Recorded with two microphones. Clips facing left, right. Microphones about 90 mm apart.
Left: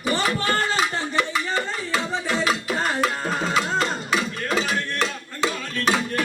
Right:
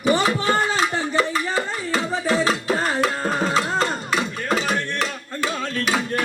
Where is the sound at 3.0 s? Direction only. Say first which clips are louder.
Right 2 dB; centre (ahead or behind).